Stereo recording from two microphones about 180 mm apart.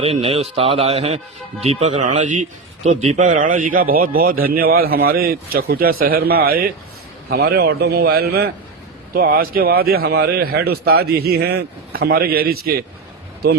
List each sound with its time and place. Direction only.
0.0 s a man's voice: 35° right (ahead or behind); by 12.8 s 55° right (ahead or behind)